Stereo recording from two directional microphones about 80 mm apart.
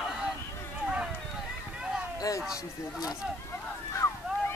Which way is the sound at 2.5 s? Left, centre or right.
Left.